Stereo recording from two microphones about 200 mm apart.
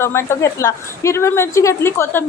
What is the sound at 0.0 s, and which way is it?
A woman's voice, 10° left (ahead or behind).